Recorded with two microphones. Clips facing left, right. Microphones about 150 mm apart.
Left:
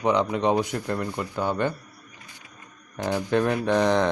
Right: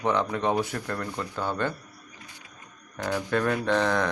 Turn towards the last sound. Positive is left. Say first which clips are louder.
# left 3 dB
turn(degrees=20)  # may be behind; listen again after turning